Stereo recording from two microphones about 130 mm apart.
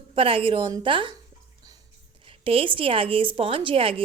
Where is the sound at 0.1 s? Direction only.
45° right (ahead or behind).